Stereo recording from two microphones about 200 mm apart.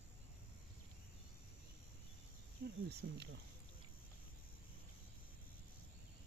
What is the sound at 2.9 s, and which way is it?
Speech, 55° right (ahead or behind).